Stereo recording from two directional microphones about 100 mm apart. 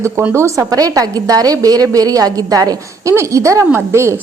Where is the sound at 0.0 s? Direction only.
25° right (ahead or behind).